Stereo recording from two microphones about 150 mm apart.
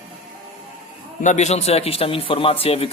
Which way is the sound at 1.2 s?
50° left (ahead or behind).